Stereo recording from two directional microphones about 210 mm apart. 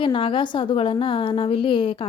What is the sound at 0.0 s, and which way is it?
A woman's voice, 25° left (ahead or behind).